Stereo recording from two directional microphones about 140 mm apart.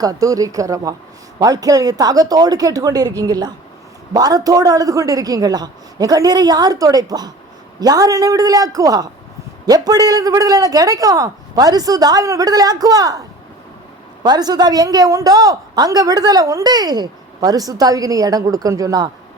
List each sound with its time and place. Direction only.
0.0 s a woman's voice: 25° right (ahead or behind)
14.3 s a woman's voice: 30° right (ahead or behind)